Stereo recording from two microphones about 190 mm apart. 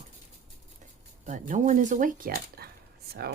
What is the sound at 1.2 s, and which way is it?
Speech, 40° right (ahead or behind).